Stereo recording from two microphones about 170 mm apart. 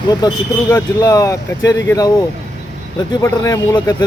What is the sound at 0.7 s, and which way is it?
Speech, 15° left (ahead or behind).